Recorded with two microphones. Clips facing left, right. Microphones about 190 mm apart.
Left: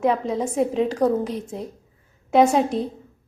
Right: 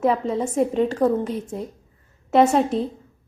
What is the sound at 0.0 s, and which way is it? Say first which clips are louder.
A woman's voice: right 1 dB; centre (ahead or behind).